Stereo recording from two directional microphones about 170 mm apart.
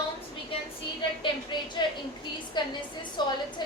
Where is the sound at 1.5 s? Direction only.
25° left (ahead or behind).